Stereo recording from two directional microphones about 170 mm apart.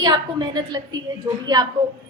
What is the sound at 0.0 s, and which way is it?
A woman's voice, 25° right (ahead or behind).